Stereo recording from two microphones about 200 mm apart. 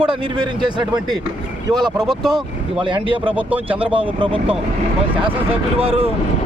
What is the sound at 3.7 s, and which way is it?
Speech, 25° right (ahead or behind).